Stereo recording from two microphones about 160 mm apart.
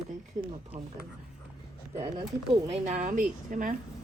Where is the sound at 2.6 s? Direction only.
45° right (ahead or behind).